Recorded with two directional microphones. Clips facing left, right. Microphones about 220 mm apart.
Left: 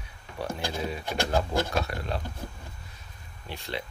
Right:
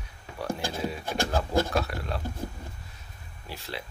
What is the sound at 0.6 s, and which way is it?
Speech, 50° right (ahead or behind).